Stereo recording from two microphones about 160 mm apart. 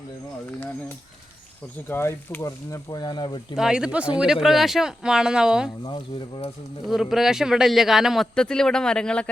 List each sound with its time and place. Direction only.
1.9 s speech: 15° left (ahead or behind)
3.5 s speech: 5° right (ahead or behind)
5.8 s speech: 30° left (ahead or behind)
6.8 s speech: centre (ahead or behind)